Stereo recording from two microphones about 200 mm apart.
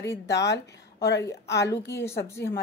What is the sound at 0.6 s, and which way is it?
Speech, 60° left (ahead or behind).